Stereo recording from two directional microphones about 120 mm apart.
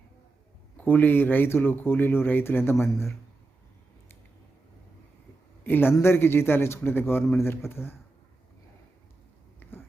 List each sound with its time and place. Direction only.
0.8 s speech: 15° left (ahead or behind)
5.6 s a man's voice: 15° left (ahead or behind)
9.6 s a sound: 15° left (ahead or behind)